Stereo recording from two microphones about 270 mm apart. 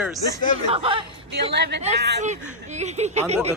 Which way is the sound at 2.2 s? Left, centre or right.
Right.